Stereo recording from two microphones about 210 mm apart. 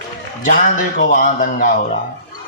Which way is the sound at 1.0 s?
40° left (ahead or behind).